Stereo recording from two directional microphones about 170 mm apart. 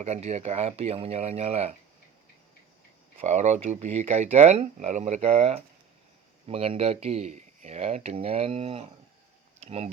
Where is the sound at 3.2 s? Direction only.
40° right (ahead or behind).